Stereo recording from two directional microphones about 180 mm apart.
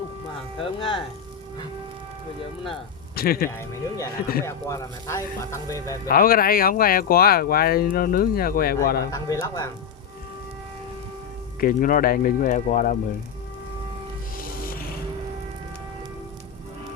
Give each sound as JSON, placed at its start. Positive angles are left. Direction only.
{"t": 0.6, "sound": "speech", "side_deg": 30}
{"t": 3.2, "sound": "speech", "side_deg": 55}
{"t": 3.6, "sound": "speech", "side_deg": 15}
{"t": 6.1, "sound": "speech", "side_deg": 55}
{"t": 9.1, "sound": "speech", "side_deg": 20}
{"t": 11.6, "sound": "speech", "side_deg": 50}
{"t": 14.3, "sound": "music", "side_deg": 55}